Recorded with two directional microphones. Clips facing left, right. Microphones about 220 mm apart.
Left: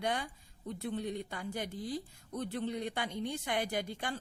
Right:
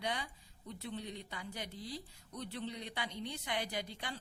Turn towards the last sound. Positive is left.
turn(degrees=50)  # may be behind; listen again after turning